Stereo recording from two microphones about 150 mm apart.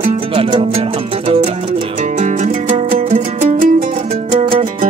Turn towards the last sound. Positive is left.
turn(degrees=-60)  # may be behind; listen again after turning